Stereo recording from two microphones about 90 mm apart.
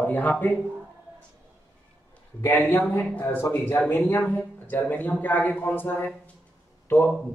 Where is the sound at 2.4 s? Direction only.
20° left (ahead or behind).